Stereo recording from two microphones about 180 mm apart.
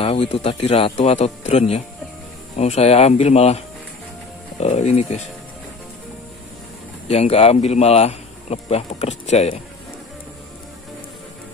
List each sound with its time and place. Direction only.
0.0 s a man's voice: 35° left (ahead or behind)
7.1 s a man's voice: 35° left (ahead or behind)